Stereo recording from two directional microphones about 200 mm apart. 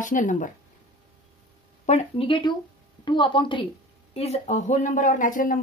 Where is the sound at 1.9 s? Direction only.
30° left (ahead or behind).